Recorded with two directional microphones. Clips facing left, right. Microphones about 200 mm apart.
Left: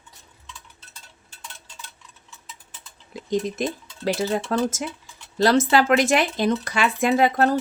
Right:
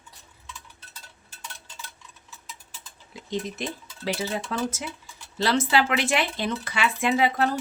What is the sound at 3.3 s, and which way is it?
Speech, 45° left (ahead or behind).